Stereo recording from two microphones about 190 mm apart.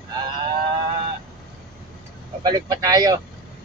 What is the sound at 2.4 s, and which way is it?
Speech, 20° right (ahead or behind).